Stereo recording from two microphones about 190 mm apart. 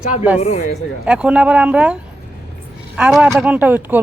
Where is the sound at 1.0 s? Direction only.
5° right (ahead or behind).